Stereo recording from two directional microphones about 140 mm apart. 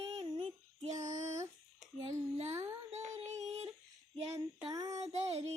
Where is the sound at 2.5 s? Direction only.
20° right (ahead or behind).